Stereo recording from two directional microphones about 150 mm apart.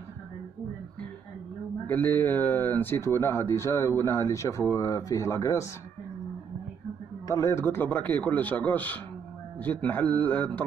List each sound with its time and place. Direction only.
1.9 s speech: 10° left (ahead or behind)
7.2 s a man's voice: 20° left (ahead or behind)